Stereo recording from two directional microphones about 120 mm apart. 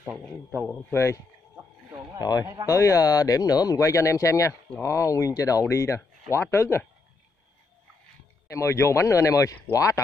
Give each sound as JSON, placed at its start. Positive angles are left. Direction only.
{"t": 0.2, "sound": "a man's voice", "side_deg": 5}
{"t": 0.9, "sound": "speech", "side_deg": 25}
{"t": 2.1, "sound": "a man's voice", "side_deg": 35}
{"t": 2.4, "sound": "speech", "side_deg": -25}
{"t": 2.7, "sound": "speech", "side_deg": 25}
{"t": 8.5, "sound": "speech", "side_deg": 25}